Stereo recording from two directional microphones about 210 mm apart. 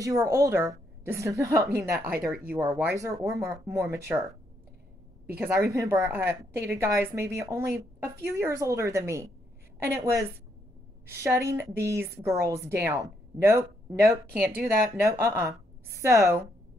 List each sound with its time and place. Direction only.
0.0 s a woman's voice: 15° right (ahead or behind)
1.9 s speech: 50° right (ahead or behind)
2.5 s a woman's voice: 10° right (ahead or behind)
5.7 s a woman's voice: 15° right (ahead or behind)